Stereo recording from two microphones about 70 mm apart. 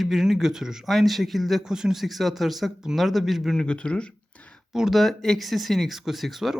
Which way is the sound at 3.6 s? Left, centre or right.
Centre.